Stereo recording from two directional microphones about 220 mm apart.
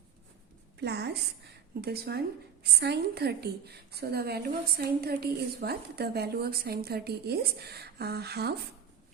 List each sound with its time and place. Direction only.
0.8 s a woman's voice: 50° right (ahead or behind)